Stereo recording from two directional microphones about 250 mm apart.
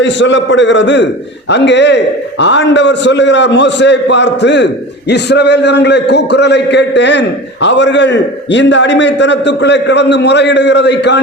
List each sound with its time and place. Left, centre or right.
0.0 s a man's voice: left